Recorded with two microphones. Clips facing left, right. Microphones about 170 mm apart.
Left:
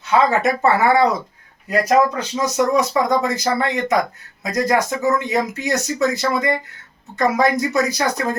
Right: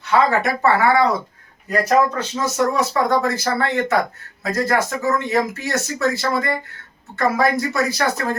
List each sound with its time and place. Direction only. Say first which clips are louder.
0.1 s speech: left 1 dB; 20° left (ahead or behind)